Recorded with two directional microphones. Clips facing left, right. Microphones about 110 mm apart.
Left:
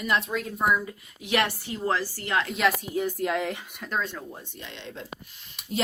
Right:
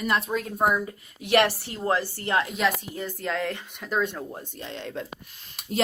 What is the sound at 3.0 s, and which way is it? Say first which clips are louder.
Speech: left 3 dB; 10° left (ahead or behind).